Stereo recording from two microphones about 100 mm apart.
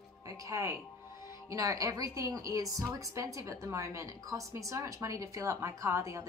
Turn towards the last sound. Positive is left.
turn(degrees=-30)  # may be behind; listen again after turning